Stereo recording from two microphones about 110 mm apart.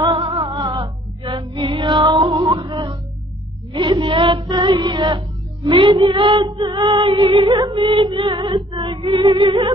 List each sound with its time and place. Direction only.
0.1 s music: 50° right (ahead or behind)
5.7 s female singing: 50° right (ahead or behind)
7.4 s music: 30° right (ahead or behind)
7.7 s female singing: 50° right (ahead or behind)
8.7 s music: 55° right (ahead or behind)
9.3 s female singing: 45° right (ahead or behind)